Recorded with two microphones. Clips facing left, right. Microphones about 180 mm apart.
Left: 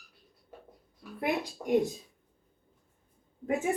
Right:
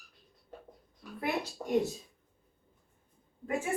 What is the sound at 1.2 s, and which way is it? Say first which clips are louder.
Speech: left 3 dB; 15° left (ahead or behind).